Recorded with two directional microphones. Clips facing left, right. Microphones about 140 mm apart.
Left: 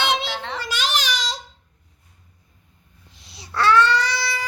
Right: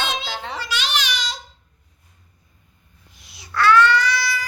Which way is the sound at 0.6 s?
45° left (ahead or behind).